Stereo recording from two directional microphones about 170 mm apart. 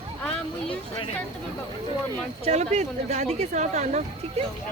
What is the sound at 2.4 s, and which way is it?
Speech, 40° right (ahead or behind).